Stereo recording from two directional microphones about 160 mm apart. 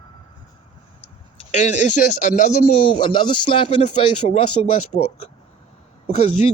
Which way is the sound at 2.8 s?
30° left (ahead or behind).